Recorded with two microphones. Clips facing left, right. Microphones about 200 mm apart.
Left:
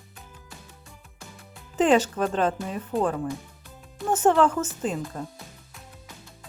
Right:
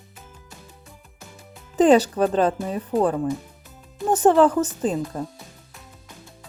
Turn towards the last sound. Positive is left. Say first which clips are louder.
# right 5 dB
turn(degrees=-35)  # may be behind; listen again after turning